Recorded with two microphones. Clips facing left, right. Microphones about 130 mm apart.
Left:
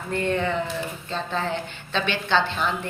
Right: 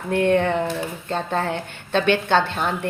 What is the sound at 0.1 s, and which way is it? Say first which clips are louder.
A woman's voice: right 6 dB; 60° right (ahead or behind).